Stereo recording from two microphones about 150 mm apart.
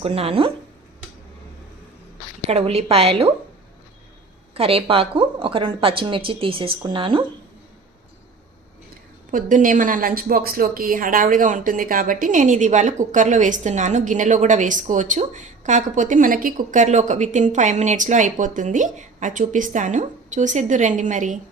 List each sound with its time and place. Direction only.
0.0 s a woman's voice: 40° right (ahead or behind)
2.5 s a woman's voice: 40° right (ahead or behind)
4.5 s a woman's voice: 40° right (ahead or behind)
9.3 s speech: 60° right (ahead or behind)